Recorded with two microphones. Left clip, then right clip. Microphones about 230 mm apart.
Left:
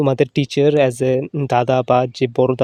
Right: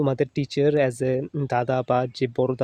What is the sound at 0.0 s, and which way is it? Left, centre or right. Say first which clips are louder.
Speech: left 7 dB; left.